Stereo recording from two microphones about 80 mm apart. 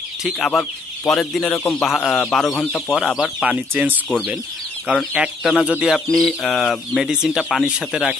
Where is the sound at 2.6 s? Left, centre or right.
Centre.